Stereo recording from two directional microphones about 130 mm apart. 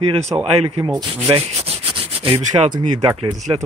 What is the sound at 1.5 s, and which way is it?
Rub, 50° right (ahead or behind).